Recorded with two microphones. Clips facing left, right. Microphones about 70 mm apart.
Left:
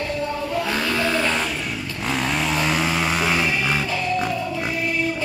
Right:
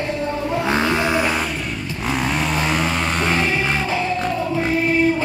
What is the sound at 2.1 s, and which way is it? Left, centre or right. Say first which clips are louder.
Music: right 1 dB; centre.